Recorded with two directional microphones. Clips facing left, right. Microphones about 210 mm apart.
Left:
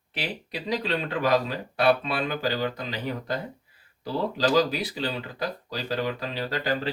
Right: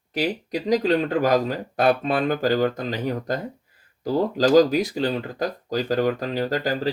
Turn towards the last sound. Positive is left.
turn(degrees=-40)  # may be behind; listen again after turning